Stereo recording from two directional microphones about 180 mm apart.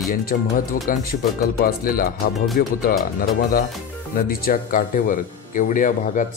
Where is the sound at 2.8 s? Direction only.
55° left (ahead or behind).